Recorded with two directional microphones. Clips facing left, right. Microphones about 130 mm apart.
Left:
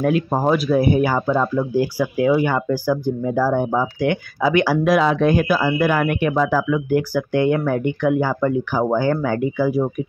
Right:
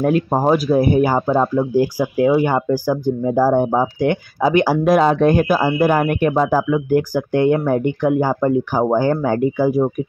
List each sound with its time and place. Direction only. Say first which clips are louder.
0.0 s speech: right 2 dB; 35° right (ahead or behind)
0.4 s speech: right 3 dB; 25° right (ahead or behind)
0.7 s speech: right 2 dB; 40° right (ahead or behind)
3.4 s speech: right 4 dB; 45° right (ahead or behind)
6.3 s speech: right 2 dB; 30° right (ahead or behind); by 9.8 s 45° right (ahead or behind)